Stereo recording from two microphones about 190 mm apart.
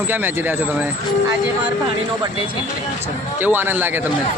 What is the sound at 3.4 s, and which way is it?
Speech, 10° right (ahead or behind).